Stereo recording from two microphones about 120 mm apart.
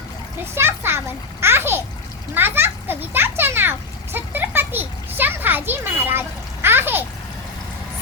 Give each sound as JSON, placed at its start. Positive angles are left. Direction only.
{"t": 0.5, "sound": "a child's voice", "side_deg": -20}
{"t": 2.3, "sound": "children playing", "side_deg": -15}